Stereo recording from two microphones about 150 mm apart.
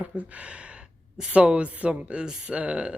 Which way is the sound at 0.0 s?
10° right (ahead or behind).